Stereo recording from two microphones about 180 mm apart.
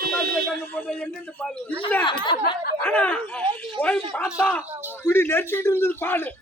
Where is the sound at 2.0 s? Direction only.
25° left (ahead or behind).